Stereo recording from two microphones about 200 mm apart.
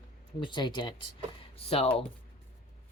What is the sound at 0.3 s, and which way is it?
Speech, 25° left (ahead or behind).